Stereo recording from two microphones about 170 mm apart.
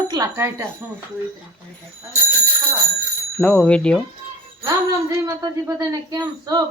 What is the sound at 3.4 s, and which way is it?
Speech, 5° left (ahead or behind).